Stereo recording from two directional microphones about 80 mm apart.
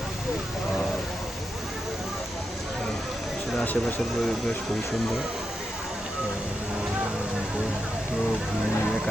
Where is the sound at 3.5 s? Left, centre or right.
Left.